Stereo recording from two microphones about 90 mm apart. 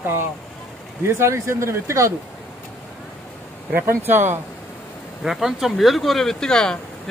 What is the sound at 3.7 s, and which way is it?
Speech, 25° right (ahead or behind).